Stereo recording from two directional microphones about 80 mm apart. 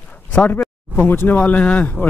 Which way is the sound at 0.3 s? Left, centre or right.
Left.